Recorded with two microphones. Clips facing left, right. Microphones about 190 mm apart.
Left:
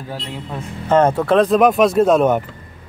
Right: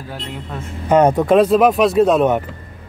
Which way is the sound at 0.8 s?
15° right (ahead or behind).